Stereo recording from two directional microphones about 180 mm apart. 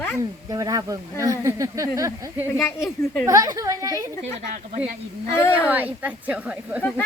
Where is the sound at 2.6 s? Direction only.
15° left (ahead or behind).